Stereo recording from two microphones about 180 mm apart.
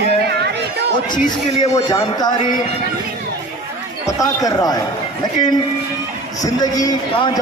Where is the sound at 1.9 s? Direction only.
25° left (ahead or behind).